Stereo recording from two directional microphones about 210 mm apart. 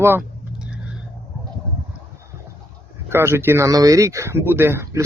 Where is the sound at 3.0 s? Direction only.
10° right (ahead or behind).